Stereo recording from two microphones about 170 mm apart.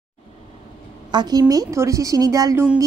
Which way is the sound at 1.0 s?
25° right (ahead or behind).